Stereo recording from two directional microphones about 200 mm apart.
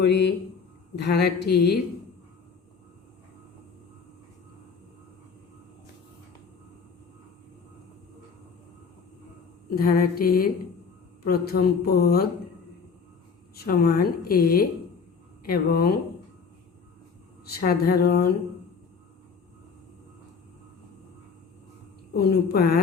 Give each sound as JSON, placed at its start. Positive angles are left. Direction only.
{"t": 0.0, "sound": "a man's voice", "side_deg": 60}
{"t": 9.6, "sound": "a woman's voice", "side_deg": 45}
{"t": 13.6, "sound": "a woman's voice", "side_deg": 45}
{"t": 17.4, "sound": "a woman's voice", "side_deg": 50}
{"t": 22.1, "sound": "a woman's voice", "side_deg": 50}